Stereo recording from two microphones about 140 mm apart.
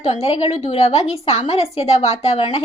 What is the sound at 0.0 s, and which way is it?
A woman's voice, 45° left (ahead or behind).